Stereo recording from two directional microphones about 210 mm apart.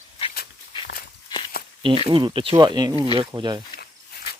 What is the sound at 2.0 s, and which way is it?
Speech, 25° right (ahead or behind).